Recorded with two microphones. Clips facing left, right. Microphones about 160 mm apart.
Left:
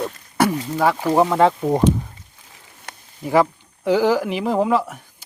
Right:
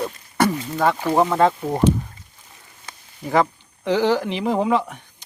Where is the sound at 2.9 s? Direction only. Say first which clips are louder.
Left 3 dB; 70° left (ahead or behind).